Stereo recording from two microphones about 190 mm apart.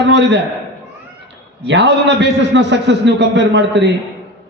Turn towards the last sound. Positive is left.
turn(degrees=-70)  # may be behind; listen again after turning